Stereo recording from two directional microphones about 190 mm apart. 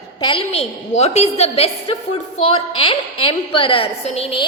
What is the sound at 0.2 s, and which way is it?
A woman's voice, 25° left (ahead or behind).